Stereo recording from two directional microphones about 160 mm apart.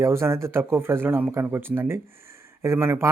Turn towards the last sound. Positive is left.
turn(degrees=-15)  # may be behind; listen again after turning